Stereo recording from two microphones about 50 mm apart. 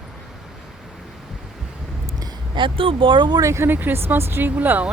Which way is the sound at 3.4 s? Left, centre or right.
Right.